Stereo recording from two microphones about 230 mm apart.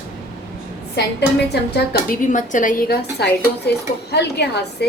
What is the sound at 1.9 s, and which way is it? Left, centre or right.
A woman's voice, left.